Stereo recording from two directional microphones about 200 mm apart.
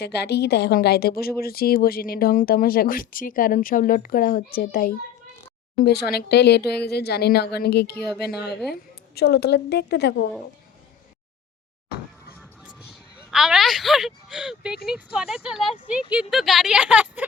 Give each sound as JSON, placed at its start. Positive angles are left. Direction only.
{"t": 0.0, "sound": "speech", "side_deg": 55}
{"t": 12.4, "sound": "a sound", "side_deg": -5}
{"t": 14.8, "sound": "speech", "side_deg": -5}